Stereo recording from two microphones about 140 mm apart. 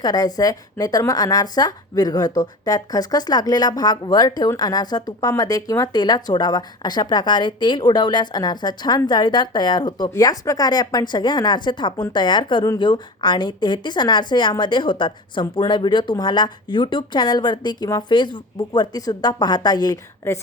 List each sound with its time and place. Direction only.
0.0 s a woman's voice: 30° left (ahead or behind)